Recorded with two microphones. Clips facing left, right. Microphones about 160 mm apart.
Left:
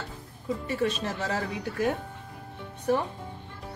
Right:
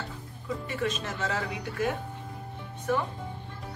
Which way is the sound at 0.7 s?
35° left (ahead or behind).